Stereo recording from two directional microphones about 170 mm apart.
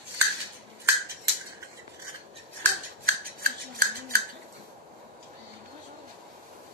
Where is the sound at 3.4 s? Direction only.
60° right (ahead or behind).